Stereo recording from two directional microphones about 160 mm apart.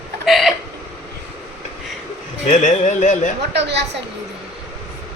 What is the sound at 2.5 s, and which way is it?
Speech, 50° left (ahead or behind).